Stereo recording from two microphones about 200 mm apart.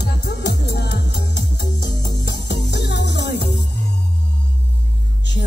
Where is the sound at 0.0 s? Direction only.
55° left (ahead or behind).